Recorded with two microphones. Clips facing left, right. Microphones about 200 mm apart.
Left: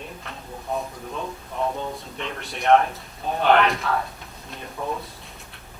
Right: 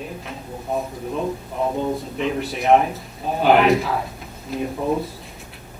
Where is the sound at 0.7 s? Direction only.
Centre (ahead or behind).